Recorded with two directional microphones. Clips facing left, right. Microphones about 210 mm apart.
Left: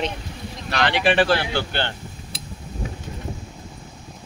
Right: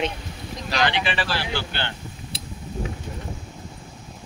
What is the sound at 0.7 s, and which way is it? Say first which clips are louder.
Speech: left 4 dB; 55° left (ahead or behind).